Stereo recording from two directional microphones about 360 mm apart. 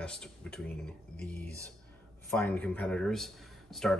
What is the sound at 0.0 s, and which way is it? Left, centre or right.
Speech, centre.